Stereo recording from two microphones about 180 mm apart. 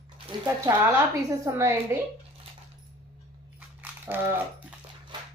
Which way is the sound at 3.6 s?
10° right (ahead or behind).